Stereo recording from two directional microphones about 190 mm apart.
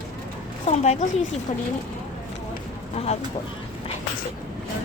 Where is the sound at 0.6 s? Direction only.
35° left (ahead or behind).